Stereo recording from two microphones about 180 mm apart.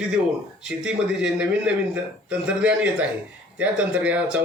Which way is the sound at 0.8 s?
5° right (ahead or behind).